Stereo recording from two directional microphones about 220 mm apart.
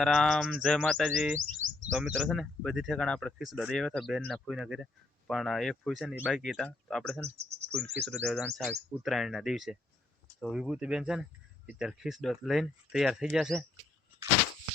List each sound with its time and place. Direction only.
0.0 s speech: centre (ahead or behind)
1.6 s bird: 65° right (ahead or behind)
2.0 s speech: 5° right (ahead or behind)
7.3 s cricket: 30° right (ahead or behind)
8.0 s speech: centre (ahead or behind)